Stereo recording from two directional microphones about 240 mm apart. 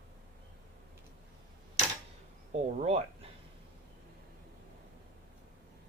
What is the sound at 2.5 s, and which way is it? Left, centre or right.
Speech, right.